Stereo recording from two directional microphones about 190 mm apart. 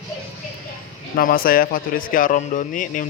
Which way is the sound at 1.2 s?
50° left (ahead or behind).